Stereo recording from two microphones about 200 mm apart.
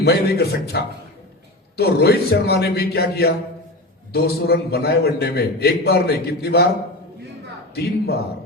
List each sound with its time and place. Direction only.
0.0 s a man's voice: 55° left (ahead or behind)
7.8 s a man's voice: 55° left (ahead or behind)